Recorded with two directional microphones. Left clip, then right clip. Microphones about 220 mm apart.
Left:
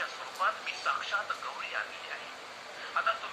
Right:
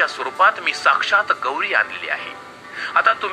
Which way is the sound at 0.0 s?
50° right (ahead or behind).